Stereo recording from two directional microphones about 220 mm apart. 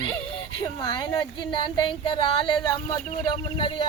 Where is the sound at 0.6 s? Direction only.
20° left (ahead or behind).